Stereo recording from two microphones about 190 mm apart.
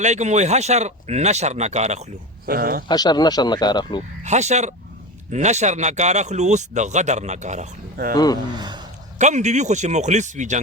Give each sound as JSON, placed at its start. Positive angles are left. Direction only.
{"t": 0.0, "sound": "speech", "side_deg": -40}
{"t": 2.5, "sound": "speech", "side_deg": -50}
{"t": 2.9, "sound": "speech", "side_deg": 20}
{"t": 4.2, "sound": "speech", "side_deg": -35}
{"t": 8.1, "sound": "speech", "side_deg": 20}
{"t": 8.5, "sound": "speech", "side_deg": -20}
{"t": 9.1, "sound": "speech", "side_deg": -40}